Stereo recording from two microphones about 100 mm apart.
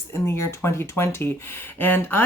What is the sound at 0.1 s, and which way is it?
Speech, 25° left (ahead or behind).